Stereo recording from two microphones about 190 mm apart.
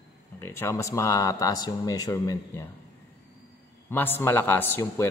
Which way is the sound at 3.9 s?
10° left (ahead or behind).